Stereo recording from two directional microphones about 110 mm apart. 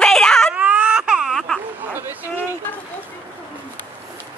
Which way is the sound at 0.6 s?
10° right (ahead or behind).